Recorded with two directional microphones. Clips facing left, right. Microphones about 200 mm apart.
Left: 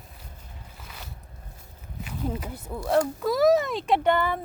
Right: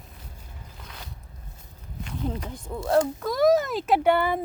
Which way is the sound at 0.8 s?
5° left (ahead or behind).